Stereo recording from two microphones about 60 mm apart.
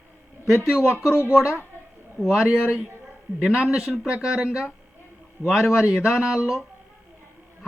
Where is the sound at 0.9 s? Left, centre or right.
Left.